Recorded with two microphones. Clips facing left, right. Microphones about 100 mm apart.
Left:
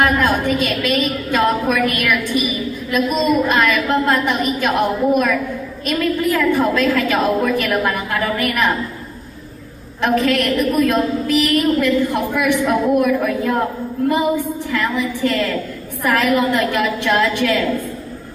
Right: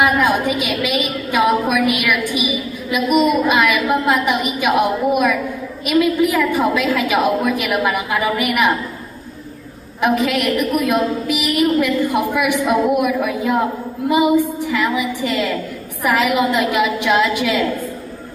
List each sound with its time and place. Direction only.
0.0 s a woman's voice: 15° right (ahead or behind)
10.0 s a woman's voice: 15° right (ahead or behind)